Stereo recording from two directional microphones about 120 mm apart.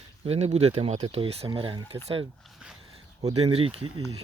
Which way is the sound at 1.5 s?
40° right (ahead or behind).